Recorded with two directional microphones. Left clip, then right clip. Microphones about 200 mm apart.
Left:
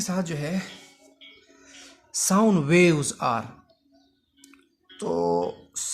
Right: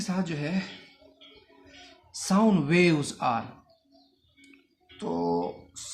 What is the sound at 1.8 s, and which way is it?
Speech, 55° left (ahead or behind).